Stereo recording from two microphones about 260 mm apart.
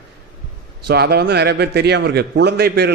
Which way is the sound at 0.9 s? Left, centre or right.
Right.